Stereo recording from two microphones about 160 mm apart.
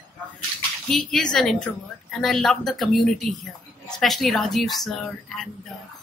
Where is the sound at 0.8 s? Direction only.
Centre (ahead or behind).